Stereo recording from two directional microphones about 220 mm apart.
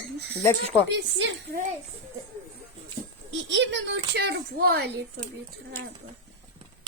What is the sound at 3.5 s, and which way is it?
A woman's voice, 55° right (ahead or behind).